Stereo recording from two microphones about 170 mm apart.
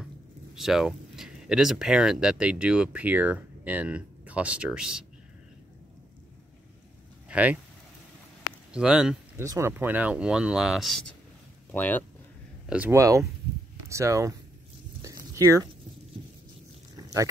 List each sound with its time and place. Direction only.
0.6 s speech: centre (ahead or behind)
7.2 s speech: 10° right (ahead or behind)
8.7 s speech: 5° right (ahead or behind)
9.4 s speech: 15° right (ahead or behind); by 12.0 s 10° left (ahead or behind)
12.6 s speech: 10° right (ahead or behind)
15.0 s a sound: 20° right (ahead or behind)
16.9 s a sound: 20° right (ahead or behind)